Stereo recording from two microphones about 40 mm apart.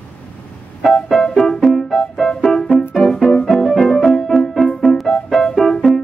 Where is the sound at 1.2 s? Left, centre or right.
Centre.